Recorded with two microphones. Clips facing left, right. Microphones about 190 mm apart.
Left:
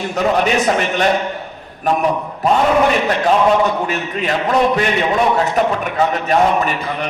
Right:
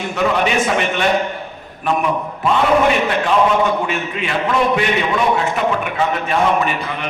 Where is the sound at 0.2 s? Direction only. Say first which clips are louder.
Left 1 dB; 40° left (ahead or behind).